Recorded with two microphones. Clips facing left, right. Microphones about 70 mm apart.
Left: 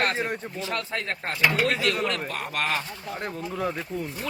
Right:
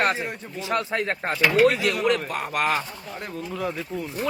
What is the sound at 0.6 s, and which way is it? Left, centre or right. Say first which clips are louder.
Speech: right 8 dB; centre.